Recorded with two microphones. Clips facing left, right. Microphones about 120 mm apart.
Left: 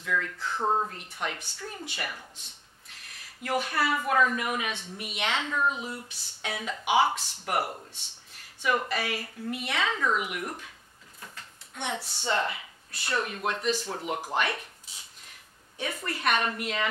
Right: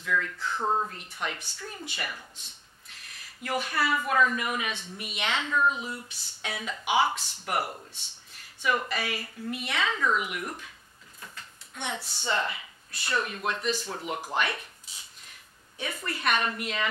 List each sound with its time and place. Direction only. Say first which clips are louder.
0.0 s speech: right 1 dB; 35° left (ahead or behind)
0.9 s speech: left 1 dB; 45° left (ahead or behind)
1.9 s speech: even; 50° left (ahead or behind)
10.4 s speech: left 1 dB; 30° left (ahead or behind)
11.1 s a sound: even; 35° left (ahead or behind)
12.3 s speech: left 1 dB; 45° left (ahead or behind)
14.3 s speech: even; 45° left (ahead or behind)
15.8 s speech: left 1 dB; 45° left (ahead or behind)